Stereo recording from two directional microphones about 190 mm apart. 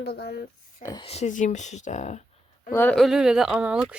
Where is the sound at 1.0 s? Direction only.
35° left (ahead or behind).